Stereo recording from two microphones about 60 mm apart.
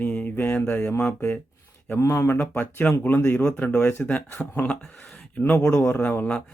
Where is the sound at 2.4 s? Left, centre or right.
Left.